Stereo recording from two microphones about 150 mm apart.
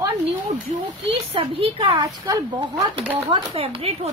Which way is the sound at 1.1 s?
40° right (ahead or behind).